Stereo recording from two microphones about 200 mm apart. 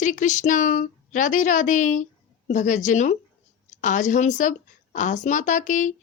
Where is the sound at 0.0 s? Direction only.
40° left (ahead or behind).